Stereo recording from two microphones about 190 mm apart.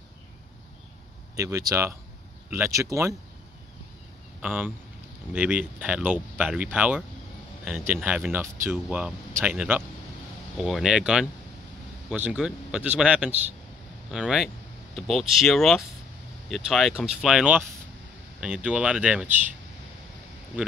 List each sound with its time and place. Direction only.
1.3 s speech: 15° right (ahead or behind)
4.4 s a man's voice: 10° right (ahead or behind)